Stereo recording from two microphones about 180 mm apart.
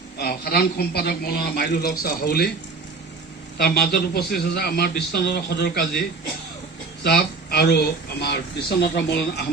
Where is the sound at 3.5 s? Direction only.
60° left (ahead or behind).